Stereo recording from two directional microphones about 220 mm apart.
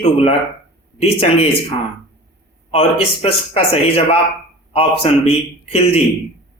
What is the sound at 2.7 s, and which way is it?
Speech, 25° left (ahead or behind).